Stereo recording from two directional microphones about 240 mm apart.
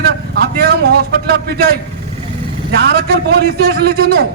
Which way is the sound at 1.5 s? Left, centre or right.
Right.